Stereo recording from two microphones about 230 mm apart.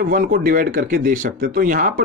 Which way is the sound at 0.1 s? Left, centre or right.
Right.